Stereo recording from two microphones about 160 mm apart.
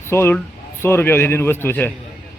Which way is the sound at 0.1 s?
15° left (ahead or behind).